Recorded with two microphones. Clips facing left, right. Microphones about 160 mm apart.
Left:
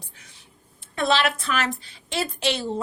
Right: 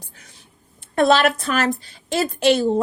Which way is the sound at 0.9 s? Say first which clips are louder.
Right 7 dB; 50° right (ahead or behind).